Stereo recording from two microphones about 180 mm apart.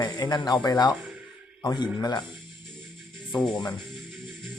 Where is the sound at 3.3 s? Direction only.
25° left (ahead or behind).